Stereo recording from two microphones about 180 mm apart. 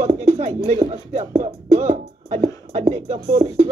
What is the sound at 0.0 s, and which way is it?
Speech, 40° right (ahead or behind).